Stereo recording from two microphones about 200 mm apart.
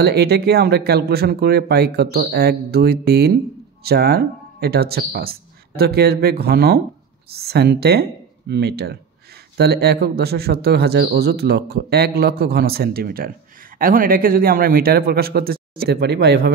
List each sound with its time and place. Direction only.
0.0 s a man's voice: 55° right (ahead or behind)